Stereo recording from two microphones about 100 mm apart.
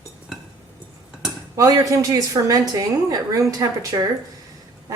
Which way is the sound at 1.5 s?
35° right (ahead or behind).